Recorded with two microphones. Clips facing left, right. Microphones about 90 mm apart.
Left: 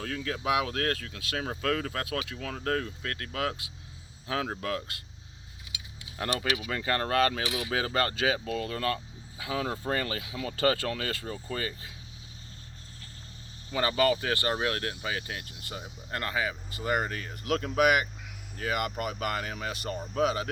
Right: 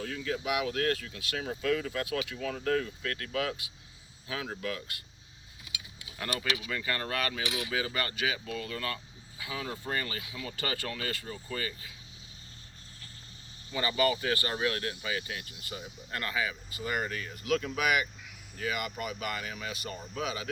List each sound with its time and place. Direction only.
0.0 s speech: 65° left (ahead or behind)
2.1 s speech: 50° left (ahead or behind)
6.1 s speech: 40° left (ahead or behind); by 11.2 s 60° left (ahead or behind)
11.2 s speech: 45° left (ahead or behind)
13.7 s speech: 65° left (ahead or behind); by 20.5 s 45° left (ahead or behind)